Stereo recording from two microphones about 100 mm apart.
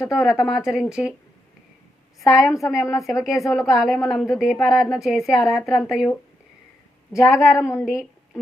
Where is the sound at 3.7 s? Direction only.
Centre (ahead or behind).